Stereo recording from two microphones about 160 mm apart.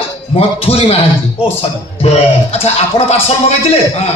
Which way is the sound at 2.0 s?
40° left (ahead or behind).